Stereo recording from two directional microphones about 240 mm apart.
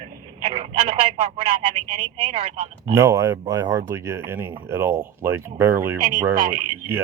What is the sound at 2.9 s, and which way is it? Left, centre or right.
Speech, centre.